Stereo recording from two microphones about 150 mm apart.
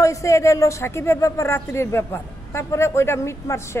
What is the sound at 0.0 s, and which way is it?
Speech, 20° left (ahead or behind).